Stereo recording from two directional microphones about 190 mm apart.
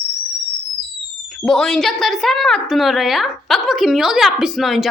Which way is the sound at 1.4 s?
Centre (ahead or behind).